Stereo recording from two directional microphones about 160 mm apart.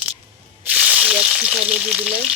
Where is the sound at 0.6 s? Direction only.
10° right (ahead or behind).